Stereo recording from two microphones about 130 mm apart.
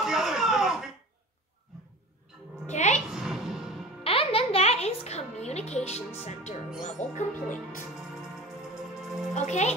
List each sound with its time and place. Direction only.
0.0 s a sound: 5° right (ahead or behind)
2.6 s music: 65° left (ahead or behind)
3.1 s music: 5° right (ahead or behind)
4.0 s music: 45° left (ahead or behind)
5.9 s speech: 60° left (ahead or behind)
9.3 s speech: 65° left (ahead or behind)